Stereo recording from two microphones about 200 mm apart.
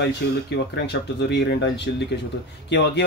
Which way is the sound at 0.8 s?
55° left (ahead or behind).